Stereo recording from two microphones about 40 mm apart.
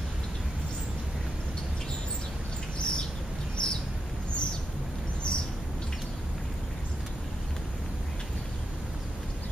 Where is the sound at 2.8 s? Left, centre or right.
Left.